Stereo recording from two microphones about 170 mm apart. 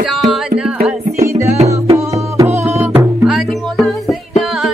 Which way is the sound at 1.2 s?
15° right (ahead or behind).